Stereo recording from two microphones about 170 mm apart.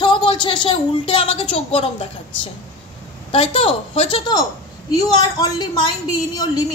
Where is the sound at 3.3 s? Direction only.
35° left (ahead or behind).